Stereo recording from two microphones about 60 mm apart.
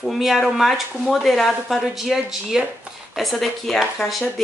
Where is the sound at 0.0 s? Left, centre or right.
Centre.